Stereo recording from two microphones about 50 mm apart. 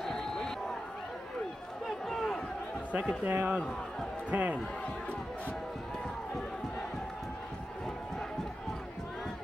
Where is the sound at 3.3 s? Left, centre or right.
Right.